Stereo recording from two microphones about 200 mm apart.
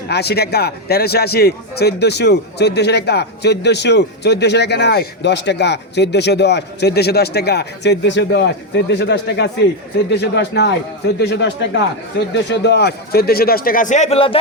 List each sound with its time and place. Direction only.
0.1 s a man's voice: 55° left (ahead or behind); by 14.3 s 30° left (ahead or behind)